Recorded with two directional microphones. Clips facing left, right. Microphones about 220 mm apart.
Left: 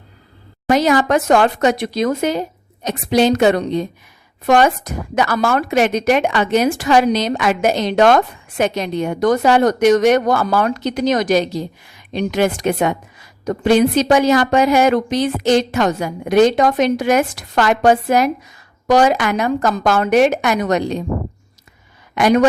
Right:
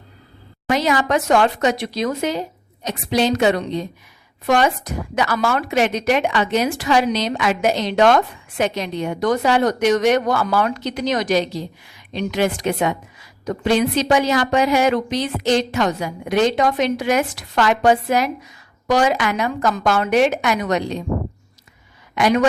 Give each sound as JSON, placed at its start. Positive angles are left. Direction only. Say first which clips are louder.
{"t": 0.7, "sound": "a woman's voice", "louder": "left 4 dB", "side_deg": 45}
{"t": 22.1, "sound": "a woman's voice", "louder": "left 4 dB", "side_deg": 45}